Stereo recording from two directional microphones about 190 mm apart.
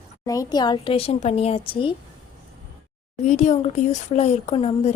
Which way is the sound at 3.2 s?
40° left (ahead or behind).